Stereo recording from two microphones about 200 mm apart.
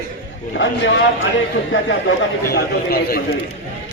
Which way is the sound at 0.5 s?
70° left (ahead or behind).